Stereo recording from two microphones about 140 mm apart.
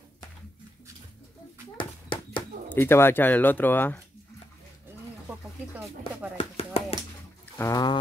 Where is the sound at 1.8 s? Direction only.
35° left (ahead or behind).